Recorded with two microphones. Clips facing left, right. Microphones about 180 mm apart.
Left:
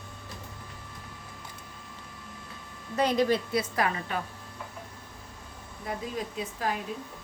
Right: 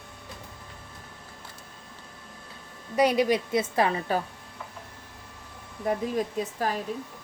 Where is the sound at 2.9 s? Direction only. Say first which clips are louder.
Right 3 dB; 10° right (ahead or behind).